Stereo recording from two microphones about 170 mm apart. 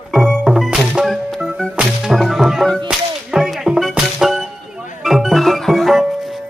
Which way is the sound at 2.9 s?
Centre (ahead or behind).